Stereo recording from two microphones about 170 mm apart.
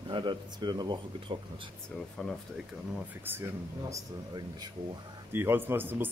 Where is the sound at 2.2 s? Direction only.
5° left (ahead or behind).